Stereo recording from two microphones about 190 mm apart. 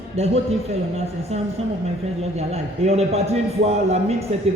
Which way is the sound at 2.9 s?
35° right (ahead or behind).